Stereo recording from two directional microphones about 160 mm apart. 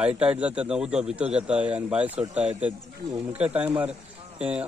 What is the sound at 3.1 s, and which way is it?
Speech, 20° right (ahead or behind).